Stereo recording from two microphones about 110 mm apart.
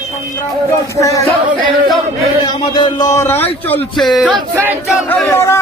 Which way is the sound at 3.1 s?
25° left (ahead or behind).